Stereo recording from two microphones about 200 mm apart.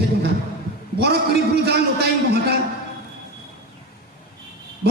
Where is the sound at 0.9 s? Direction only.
55° right (ahead or behind).